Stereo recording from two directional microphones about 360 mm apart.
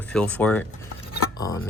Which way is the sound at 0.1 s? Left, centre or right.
Centre.